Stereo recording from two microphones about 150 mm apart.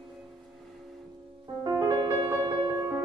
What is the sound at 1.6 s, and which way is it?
Music, 20° right (ahead or behind).